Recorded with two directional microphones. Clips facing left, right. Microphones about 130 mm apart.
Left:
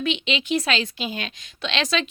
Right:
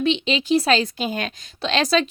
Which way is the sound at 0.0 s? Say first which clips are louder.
Right 4 dB; 35° right (ahead or behind).